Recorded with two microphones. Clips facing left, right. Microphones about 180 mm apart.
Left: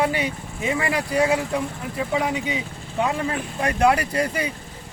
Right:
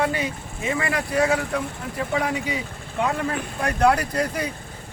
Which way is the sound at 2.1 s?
5° left (ahead or behind).